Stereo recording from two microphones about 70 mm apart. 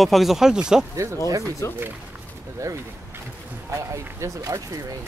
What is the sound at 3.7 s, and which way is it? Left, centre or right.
Speech, right.